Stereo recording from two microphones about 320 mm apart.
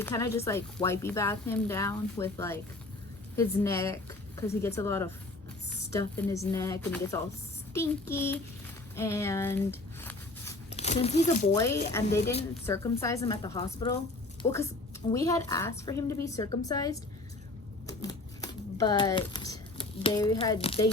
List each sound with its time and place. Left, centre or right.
0.0 s speech: centre
10.7 s speech: centre
12.0 s speech: centre
17.8 s typewriter: centre